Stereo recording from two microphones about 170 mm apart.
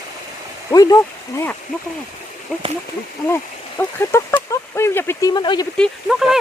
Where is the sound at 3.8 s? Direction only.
15° left (ahead or behind).